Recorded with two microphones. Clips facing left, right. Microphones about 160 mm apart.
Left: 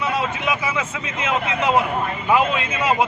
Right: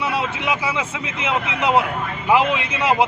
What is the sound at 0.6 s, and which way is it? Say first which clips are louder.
A man's voice: right 1 dB; 10° right (ahead or behind).